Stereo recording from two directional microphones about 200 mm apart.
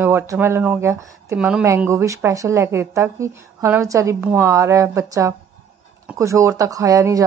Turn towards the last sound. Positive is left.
turn(degrees=-15)  # may be behind; listen again after turning